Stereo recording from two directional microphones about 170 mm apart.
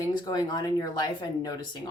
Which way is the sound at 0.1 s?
25° left (ahead or behind).